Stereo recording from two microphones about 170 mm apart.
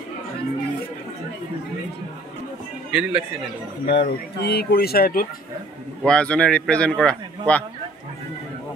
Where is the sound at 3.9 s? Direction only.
75° left (ahead or behind).